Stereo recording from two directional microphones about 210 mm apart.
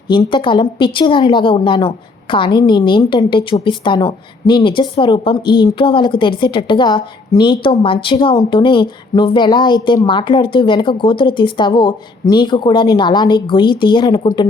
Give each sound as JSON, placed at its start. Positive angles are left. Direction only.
{"t": 0.1, "sound": "a woman's voice", "side_deg": 20}